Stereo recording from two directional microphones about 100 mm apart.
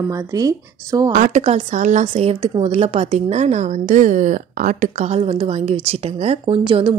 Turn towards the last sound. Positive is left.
turn(degrees=-65)  # may be behind; listen again after turning